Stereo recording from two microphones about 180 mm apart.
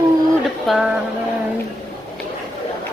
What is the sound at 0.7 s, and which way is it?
Speech, 5° right (ahead or behind).